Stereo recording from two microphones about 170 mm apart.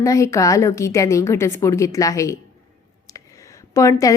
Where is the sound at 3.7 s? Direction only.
20° left (ahead or behind).